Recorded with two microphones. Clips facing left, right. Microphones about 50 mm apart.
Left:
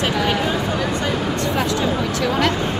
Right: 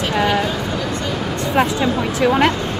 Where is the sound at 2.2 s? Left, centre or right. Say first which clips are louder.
Right 6 dB; right.